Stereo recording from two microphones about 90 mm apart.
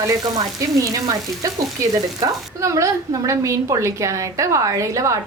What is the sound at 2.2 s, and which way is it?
A woman's voice, 35° right (ahead or behind).